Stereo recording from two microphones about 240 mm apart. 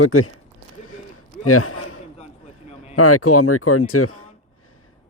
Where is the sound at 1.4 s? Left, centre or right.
Left.